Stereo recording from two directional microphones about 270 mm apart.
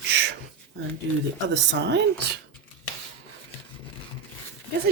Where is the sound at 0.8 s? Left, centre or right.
Right.